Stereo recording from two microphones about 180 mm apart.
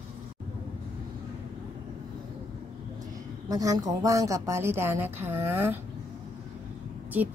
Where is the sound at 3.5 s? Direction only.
20° right (ahead or behind).